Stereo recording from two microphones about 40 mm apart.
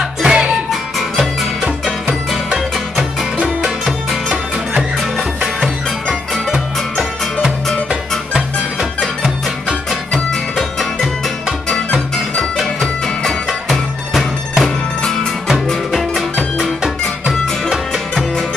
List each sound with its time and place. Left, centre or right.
0.2 s music: centre
0.7 s music: centre
1.6 s music: centre
3.8 s music: centre
6.3 s music: centre
11.7 s music: centre
15.7 s music: centre